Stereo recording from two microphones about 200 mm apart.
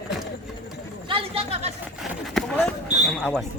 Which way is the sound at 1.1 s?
30° right (ahead or behind).